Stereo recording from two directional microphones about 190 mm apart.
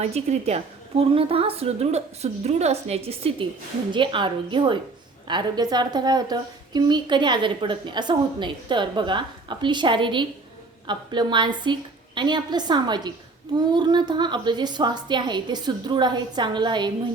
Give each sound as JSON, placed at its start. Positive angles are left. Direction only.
{"t": 0.0, "sound": "a woman's voice", "side_deg": -35}